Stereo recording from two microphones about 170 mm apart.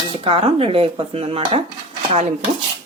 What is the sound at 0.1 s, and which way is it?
Speech, 35° right (ahead or behind).